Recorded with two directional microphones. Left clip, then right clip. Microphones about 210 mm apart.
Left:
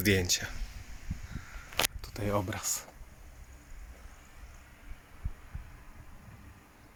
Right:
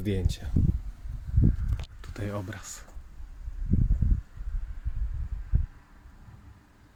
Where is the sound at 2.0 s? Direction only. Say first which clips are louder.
Left 4 dB; 25° left (ahead or behind).